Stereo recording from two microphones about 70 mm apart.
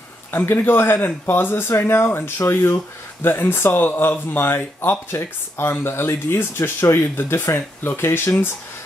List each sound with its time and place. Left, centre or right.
0.3 s speech: left